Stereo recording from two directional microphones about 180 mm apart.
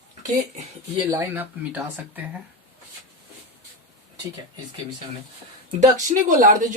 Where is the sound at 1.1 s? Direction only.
15° right (ahead or behind).